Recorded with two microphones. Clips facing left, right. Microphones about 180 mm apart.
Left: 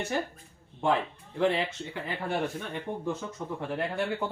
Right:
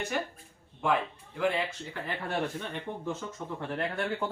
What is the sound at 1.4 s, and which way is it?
Speech, 25° left (ahead or behind).